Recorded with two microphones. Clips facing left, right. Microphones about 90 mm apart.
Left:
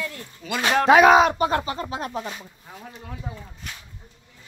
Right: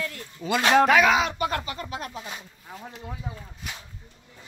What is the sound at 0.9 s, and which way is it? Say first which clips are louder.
Speech: left 6 dB; 40° left (ahead or behind).